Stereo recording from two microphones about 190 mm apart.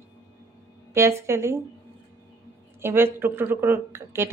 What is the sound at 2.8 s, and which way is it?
A woman's voice, 10° right (ahead or behind).